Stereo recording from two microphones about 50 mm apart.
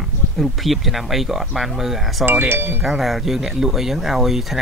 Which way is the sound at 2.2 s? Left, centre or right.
Right.